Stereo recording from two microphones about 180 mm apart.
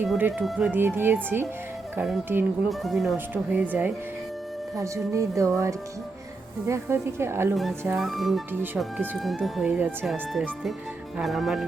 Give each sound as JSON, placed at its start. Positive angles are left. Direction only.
{"t": 0.0, "sound": "speech", "side_deg": -10}
{"t": 7.5, "sound": "speech", "side_deg": 0}